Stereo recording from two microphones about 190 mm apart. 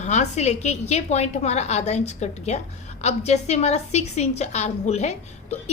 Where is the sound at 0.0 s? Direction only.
35° left (ahead or behind).